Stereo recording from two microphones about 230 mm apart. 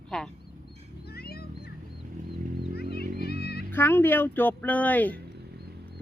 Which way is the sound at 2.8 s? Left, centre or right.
Left.